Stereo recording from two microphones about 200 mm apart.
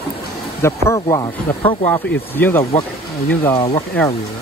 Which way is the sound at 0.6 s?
15° left (ahead or behind).